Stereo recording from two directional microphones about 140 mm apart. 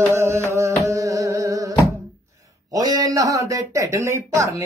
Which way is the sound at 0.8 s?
20° right (ahead or behind).